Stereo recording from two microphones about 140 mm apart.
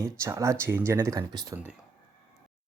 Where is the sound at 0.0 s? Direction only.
20° right (ahead or behind).